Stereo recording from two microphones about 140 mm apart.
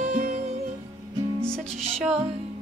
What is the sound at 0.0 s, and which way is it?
Music, 60° right (ahead or behind).